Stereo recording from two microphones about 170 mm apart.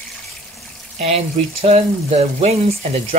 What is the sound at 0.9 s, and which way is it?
Speech, 40° right (ahead or behind).